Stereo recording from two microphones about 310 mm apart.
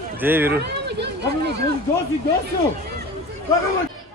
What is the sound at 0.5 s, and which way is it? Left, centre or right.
Speech, right.